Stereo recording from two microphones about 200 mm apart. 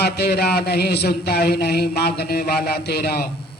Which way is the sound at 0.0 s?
50° left (ahead or behind).